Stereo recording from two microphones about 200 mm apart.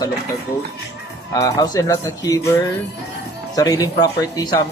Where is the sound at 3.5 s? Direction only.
20° left (ahead or behind).